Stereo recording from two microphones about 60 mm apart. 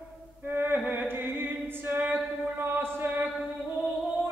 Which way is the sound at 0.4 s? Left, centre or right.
Right.